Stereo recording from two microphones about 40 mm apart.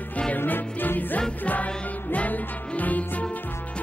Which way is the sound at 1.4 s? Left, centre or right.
Left.